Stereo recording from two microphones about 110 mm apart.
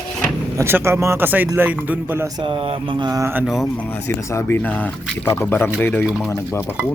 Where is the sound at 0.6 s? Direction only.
25° right (ahead or behind).